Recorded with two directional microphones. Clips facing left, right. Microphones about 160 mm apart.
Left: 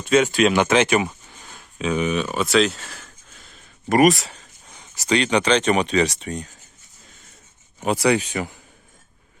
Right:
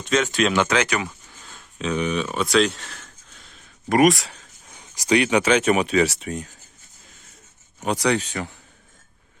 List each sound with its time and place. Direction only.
0.0 s speech: 10° left (ahead or behind)
1.5 s speech: 5° left (ahead or behind)
4.8 s speech: 10° right (ahead or behind)
7.8 s speech: 5° left (ahead or behind)